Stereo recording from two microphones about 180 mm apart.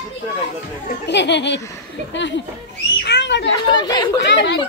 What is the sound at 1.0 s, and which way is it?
A woman's voice, 75° left (ahead or behind).